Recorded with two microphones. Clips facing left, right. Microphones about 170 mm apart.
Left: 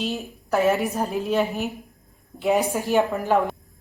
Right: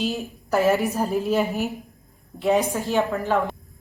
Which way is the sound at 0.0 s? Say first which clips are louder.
Right 2 dB; centre (ahead or behind).